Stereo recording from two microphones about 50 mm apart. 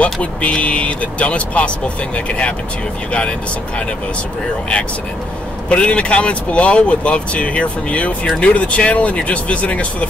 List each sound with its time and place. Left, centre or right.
0.0 s speech: left
5.7 s speech: left